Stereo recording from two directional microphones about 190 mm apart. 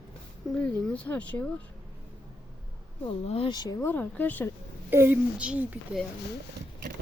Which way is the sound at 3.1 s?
30° left (ahead or behind).